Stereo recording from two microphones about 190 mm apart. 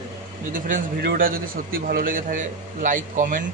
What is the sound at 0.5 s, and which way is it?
A man's voice, 45° right (ahead or behind).